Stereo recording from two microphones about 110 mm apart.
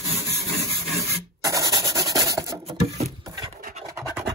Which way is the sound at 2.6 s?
70° right (ahead or behind).